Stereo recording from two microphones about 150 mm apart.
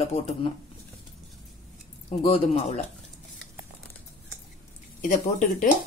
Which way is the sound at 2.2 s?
40° left (ahead or behind).